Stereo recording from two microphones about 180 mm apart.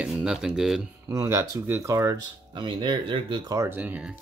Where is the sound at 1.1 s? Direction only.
15° right (ahead or behind).